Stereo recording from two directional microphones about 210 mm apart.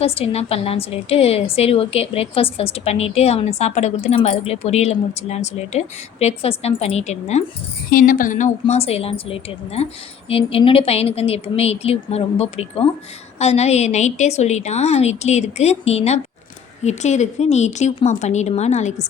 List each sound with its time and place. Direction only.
0.0 s a woman's voice: 30° left (ahead or behind)